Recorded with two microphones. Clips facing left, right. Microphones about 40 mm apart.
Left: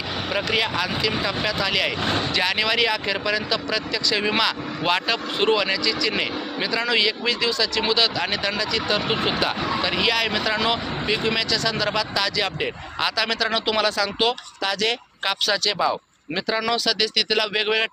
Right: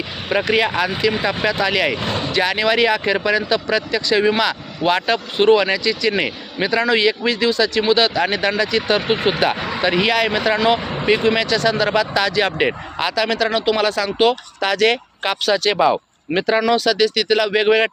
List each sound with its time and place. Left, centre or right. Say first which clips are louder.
0.3 s speech: right 7 dB; right
2.3 s speech: right 8 dB; centre
4.4 s speech: right 3 dB; centre
5.0 s speech: right 6 dB; centre
8.4 s speech: right 6 dB; right
9.9 s speech: right 7 dB; right
10.8 s a sound: right 7 dB; right
11.3 s speech: right 6 dB; right
13.0 s speech: right 4 dB; centre
14.6 s speech: right 7 dB; right
15.2 s speech: right 4 dB; centre
16.6 s speech: right 7 dB; centre